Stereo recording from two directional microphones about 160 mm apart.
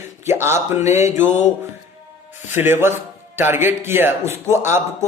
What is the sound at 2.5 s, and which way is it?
A man's voice, 15° right (ahead or behind).